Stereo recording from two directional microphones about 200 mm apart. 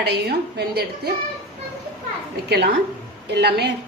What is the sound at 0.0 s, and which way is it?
A woman's voice, 55° right (ahead or behind).